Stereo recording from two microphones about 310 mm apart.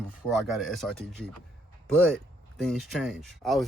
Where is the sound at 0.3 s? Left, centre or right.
Centre.